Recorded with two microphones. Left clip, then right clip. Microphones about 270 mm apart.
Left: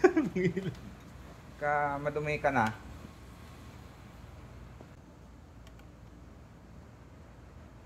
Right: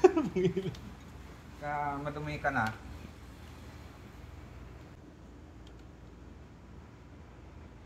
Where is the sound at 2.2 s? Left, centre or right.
Centre.